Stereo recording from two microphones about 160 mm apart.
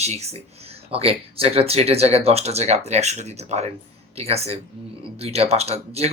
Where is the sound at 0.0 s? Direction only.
45° right (ahead or behind).